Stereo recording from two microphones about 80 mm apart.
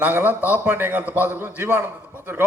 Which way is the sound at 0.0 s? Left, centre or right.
Right.